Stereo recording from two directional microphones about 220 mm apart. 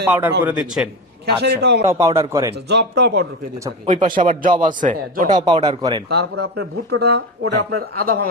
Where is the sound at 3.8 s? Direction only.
35° right (ahead or behind).